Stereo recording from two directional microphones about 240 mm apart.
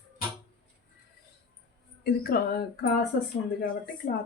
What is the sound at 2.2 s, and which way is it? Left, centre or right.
Speech, left.